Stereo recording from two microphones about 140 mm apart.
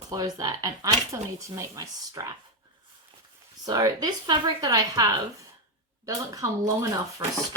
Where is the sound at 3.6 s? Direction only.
25° right (ahead or behind).